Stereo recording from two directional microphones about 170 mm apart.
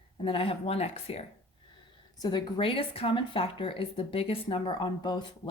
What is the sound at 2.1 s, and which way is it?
Speech, 25° left (ahead or behind).